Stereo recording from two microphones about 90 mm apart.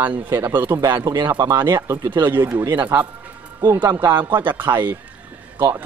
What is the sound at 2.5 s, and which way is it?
Speech, 35° right (ahead or behind).